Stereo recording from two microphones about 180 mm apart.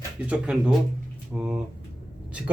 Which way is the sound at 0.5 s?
5° right (ahead or behind).